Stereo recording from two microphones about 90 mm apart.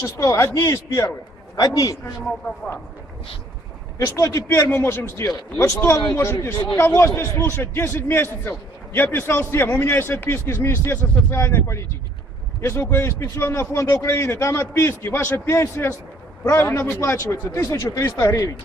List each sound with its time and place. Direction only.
0.0 s a man's voice: 35° left (ahead or behind)
3.9 s a man's voice: 35° left (ahead or behind)
6.3 s a man's voice: 40° left (ahead or behind)
6.7 s a man's voice: 30° left (ahead or behind)